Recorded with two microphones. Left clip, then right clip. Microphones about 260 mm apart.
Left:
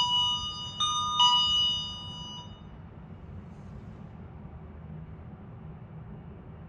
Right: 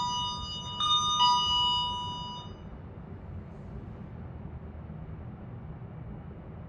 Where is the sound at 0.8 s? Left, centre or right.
Left.